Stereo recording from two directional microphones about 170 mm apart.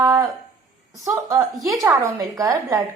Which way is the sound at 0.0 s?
25° right (ahead or behind).